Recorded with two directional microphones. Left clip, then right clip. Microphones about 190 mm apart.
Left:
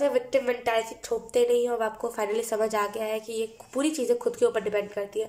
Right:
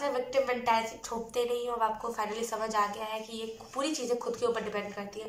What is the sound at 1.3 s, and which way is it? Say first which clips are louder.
A woman's voice: left 9 dB; 45° left (ahead or behind).